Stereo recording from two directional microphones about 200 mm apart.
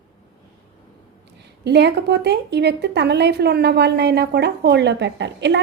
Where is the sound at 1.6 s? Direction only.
55° right (ahead or behind).